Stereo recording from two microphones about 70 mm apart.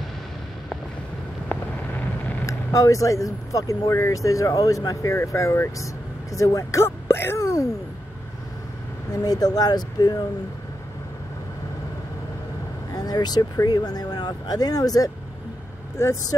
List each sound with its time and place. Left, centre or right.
1.5 s a sound: left
2.4 s speech: left
9.1 s speech: left
12.9 s speech: left
16.0 s speech: left